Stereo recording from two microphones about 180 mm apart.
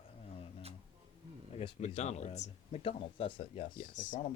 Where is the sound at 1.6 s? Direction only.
35° left (ahead or behind).